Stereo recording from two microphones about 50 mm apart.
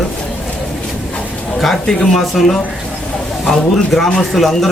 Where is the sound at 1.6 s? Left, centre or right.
Centre.